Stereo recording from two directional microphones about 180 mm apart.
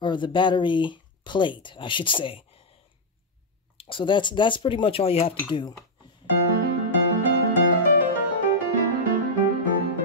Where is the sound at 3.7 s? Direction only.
30° left (ahead or behind).